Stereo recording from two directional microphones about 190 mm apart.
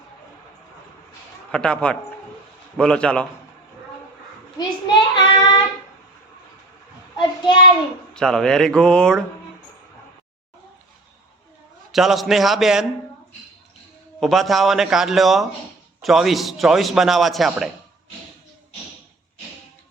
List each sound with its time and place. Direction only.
1.5 s a man's voice: 5° left (ahead or behind)
4.5 s child singing: 20° left (ahead or behind)
7.2 s child singing: 25° left (ahead or behind)
8.1 s a man's voice: 5° left (ahead or behind)
11.9 s a man's voice: centre (ahead or behind)
14.2 s a man's voice: centre (ahead or behind)